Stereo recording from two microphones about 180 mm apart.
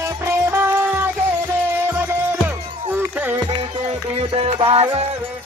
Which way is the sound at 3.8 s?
30° right (ahead or behind).